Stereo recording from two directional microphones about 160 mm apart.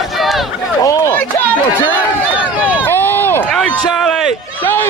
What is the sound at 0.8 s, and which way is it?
Speech, 20° left (ahead or behind).